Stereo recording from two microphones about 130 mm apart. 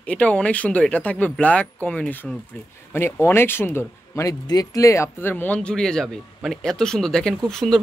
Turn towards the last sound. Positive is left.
turn(degrees=5)  # may be behind; listen again after turning